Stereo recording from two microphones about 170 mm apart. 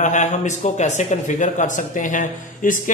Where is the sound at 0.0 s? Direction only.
45° left (ahead or behind).